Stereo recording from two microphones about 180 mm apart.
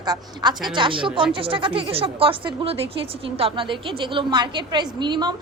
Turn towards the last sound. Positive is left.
turn(degrees=-25)  # may be behind; listen again after turning